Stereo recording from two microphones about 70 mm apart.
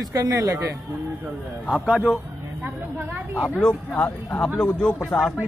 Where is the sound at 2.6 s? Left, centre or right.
Right.